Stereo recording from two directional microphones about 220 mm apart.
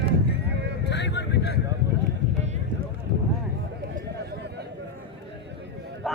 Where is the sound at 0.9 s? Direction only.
50° left (ahead or behind).